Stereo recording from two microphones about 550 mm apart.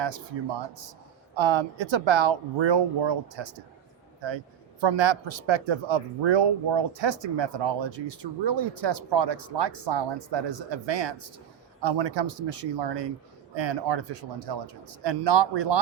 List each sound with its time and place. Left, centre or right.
1.4 s speech: right
4.8 s speech: right